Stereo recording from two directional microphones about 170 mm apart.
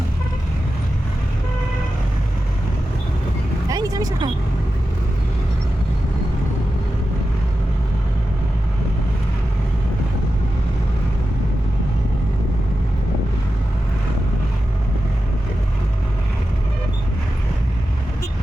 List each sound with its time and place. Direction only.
3.7 s vehicle: 20° right (ahead or behind)